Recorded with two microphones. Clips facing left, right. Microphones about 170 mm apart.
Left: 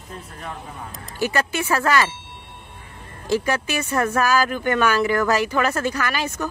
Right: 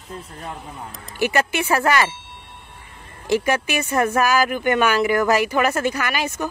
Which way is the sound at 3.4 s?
15° right (ahead or behind).